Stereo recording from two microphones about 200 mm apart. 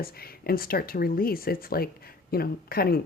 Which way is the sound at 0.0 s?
50° left (ahead or behind).